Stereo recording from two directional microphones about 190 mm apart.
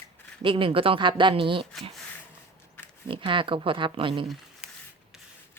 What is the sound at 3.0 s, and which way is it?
A woman's voice, 25° right (ahead or behind).